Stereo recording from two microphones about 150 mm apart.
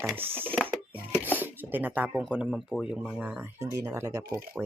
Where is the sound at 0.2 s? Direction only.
15° right (ahead or behind).